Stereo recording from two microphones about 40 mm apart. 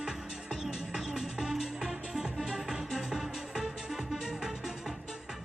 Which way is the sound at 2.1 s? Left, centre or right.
Centre.